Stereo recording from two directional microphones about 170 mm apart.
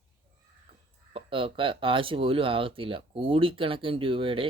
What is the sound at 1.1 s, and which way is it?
Speech, 30° right (ahead or behind).